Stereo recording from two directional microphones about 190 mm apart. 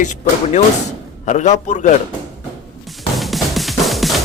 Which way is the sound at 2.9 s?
Centre (ahead or behind).